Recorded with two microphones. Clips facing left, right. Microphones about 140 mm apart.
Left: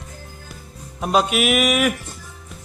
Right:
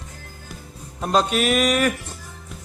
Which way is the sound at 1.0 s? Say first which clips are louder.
Left 1 dB; 10° left (ahead or behind).